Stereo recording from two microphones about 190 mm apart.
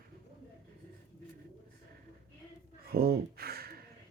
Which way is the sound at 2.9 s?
55° right (ahead or behind).